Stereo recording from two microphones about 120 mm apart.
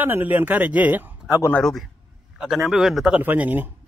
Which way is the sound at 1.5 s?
5° left (ahead or behind).